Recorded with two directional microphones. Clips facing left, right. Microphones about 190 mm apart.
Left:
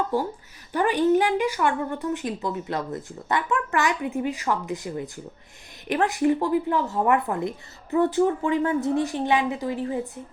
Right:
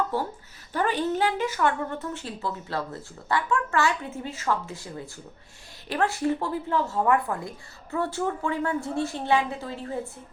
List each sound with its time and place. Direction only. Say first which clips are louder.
0.1 s a woman's voice: left 4 dB; 15° left (ahead or behind)